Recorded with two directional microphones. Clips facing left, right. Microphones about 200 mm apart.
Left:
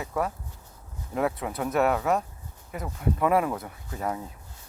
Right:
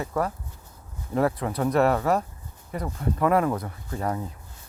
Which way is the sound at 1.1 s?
Centre (ahead or behind).